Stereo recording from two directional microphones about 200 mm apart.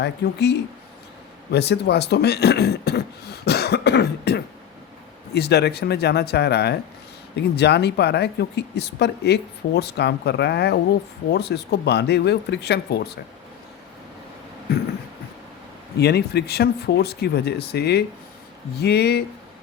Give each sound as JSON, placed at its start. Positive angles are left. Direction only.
{"t": 0.0, "sound": "speech", "side_deg": 55}
{"t": 16.0, "sound": "speech", "side_deg": 55}